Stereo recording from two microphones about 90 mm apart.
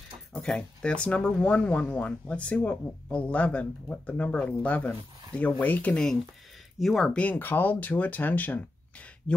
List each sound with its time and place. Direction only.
0.3 s speech: 10° left (ahead or behind)
6.8 s speech: centre (ahead or behind)
7.2 s speech: 20° left (ahead or behind)